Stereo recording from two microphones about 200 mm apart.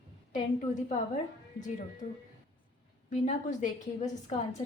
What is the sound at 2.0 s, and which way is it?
A woman's voice, 35° left (ahead or behind).